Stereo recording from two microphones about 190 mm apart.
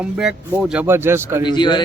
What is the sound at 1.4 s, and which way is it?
Speech, 25° left (ahead or behind).